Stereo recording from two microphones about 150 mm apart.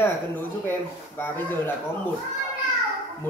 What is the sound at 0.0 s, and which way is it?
Speech, 15° left (ahead or behind).